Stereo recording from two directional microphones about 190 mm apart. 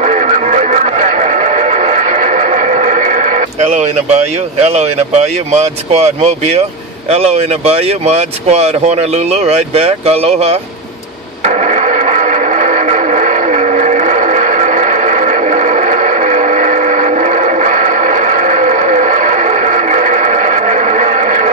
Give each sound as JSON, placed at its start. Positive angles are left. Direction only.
{"t": 0.0, "sound": "music", "side_deg": -40}
{"t": 7.1, "sound": "speech", "side_deg": -35}
{"t": 11.4, "sound": "radio", "side_deg": -40}